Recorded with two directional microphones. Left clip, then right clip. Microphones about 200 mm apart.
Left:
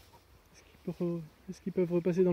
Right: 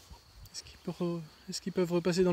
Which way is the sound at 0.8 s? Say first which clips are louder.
Even; 30° right (ahead or behind).